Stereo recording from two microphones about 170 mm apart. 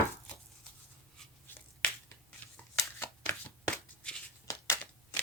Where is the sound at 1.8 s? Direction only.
5° left (ahead or behind).